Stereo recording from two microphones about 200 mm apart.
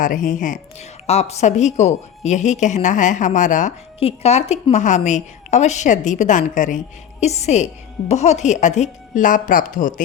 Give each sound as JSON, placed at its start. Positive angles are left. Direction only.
{"t": 0.0, "sound": "a woman's voice", "side_deg": 40}